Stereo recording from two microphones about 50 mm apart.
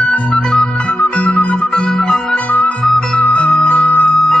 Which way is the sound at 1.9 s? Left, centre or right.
Centre.